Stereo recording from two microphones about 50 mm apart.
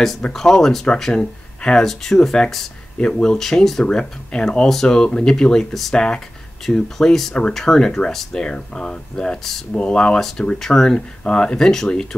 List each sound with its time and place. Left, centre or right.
0.3 s speech: centre
1.1 s speech: centre
1.9 s speech: centre
3.3 s speech: centre
9.8 s speech: centre